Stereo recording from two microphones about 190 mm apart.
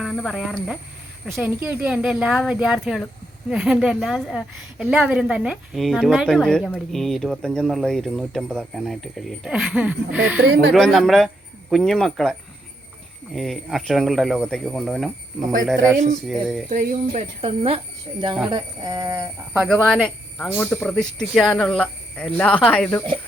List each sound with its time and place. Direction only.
0.0 s a woman's voice: centre (ahead or behind)
15.7 s train: 15° right (ahead or behind)
16.2 s a woman's voice: centre (ahead or behind)
16.6 s speech: 40° right (ahead or behind)
17.1 s speech: 30° right (ahead or behind)
18.5 s train: 20° right (ahead or behind)
19.5 s a woman's voice: centre (ahead or behind)